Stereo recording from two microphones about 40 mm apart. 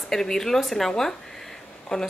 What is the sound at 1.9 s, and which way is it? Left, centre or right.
Speech, left.